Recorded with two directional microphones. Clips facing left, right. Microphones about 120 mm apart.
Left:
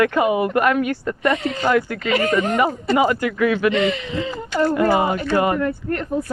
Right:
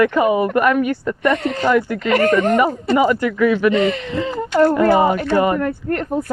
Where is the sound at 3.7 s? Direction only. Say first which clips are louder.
Right 3 dB; 45° right (ahead or behind).